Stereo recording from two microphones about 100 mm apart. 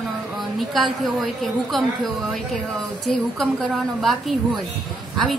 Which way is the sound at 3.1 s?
5° left (ahead or behind).